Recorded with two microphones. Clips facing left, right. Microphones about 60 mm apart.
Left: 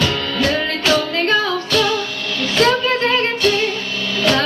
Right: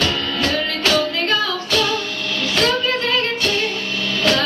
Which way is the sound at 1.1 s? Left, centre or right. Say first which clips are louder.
Left 3 dB; left.